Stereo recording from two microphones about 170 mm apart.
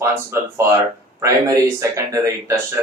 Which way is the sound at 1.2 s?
20° right (ahead or behind).